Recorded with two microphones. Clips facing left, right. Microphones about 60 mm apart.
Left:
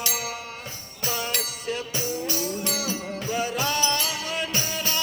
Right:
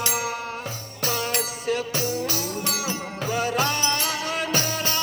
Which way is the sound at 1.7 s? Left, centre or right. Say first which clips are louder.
Right 4 dB; right.